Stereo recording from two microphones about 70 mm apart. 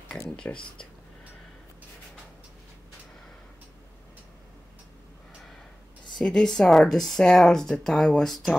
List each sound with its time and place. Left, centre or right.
0.4 s speech: centre
6.1 s speech: centre